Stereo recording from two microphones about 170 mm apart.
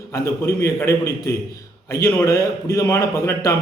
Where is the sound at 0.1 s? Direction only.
15° left (ahead or behind).